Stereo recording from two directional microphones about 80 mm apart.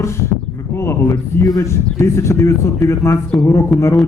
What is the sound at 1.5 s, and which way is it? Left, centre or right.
Speech, left.